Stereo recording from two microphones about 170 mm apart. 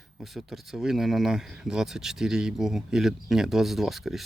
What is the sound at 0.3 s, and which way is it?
Speech, centre (ahead or behind).